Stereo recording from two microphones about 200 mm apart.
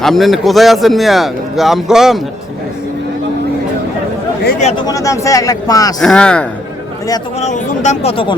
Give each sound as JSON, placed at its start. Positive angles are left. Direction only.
{"t": 0.0, "sound": "a man's voice", "side_deg": 0}
{"t": 4.8, "sound": "speech", "side_deg": 15}
{"t": 6.0, "sound": "a man's voice", "side_deg": 5}
{"t": 7.3, "sound": "speech", "side_deg": 35}